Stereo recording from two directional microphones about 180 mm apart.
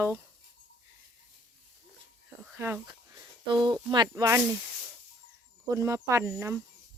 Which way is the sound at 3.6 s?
25° right (ahead or behind).